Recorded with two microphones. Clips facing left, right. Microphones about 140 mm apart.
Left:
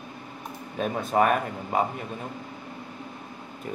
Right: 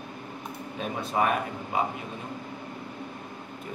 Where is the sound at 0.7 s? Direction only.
50° left (ahead or behind).